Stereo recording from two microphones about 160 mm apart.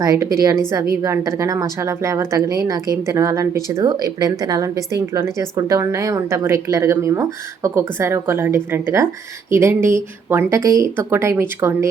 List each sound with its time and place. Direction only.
0.0 s speech: 20° right (ahead or behind)